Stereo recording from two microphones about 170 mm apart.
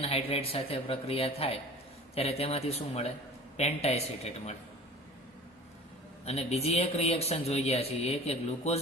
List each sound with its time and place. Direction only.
0.0 s a man's voice: 35° left (ahead or behind)
6.2 s a man's voice: 40° left (ahead or behind)